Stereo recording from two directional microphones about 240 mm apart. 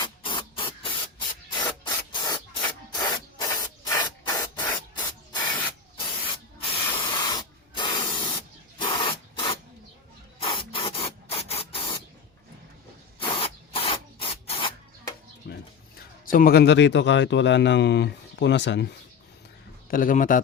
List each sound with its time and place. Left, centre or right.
0.0 s spray: centre
1.8 s rub: centre
6.6 s spray: left
13.2 s rub: left
16.3 s speech: left
19.9 s a man's voice: left